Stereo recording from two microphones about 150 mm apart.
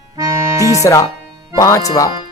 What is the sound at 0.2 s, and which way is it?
Music, 20° right (ahead or behind).